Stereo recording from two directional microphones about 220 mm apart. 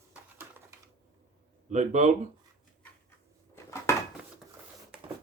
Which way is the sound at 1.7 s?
35° right (ahead or behind).